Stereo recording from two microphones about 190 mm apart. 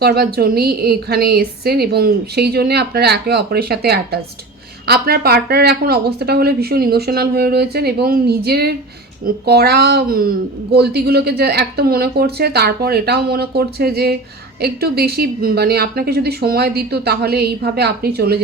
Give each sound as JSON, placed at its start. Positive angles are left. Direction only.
{"t": 0.0, "sound": "a woman's voice", "side_deg": -55}